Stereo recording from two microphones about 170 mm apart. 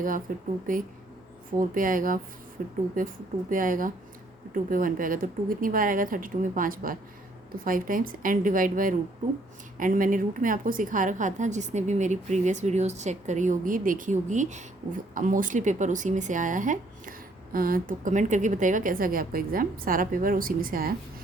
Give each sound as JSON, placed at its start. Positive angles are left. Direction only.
{"t": 0.3, "sound": "speech", "side_deg": -55}